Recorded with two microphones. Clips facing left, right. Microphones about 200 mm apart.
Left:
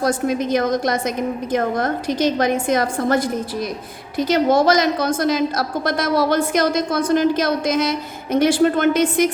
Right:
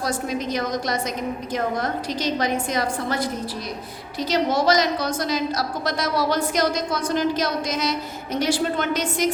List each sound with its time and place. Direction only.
0.0 s a woman's voice: 50° left (ahead or behind)
4.3 s a woman's voice: 50° left (ahead or behind)